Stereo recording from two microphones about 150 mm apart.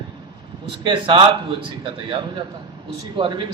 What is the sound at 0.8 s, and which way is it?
A man's voice, 35° right (ahead or behind).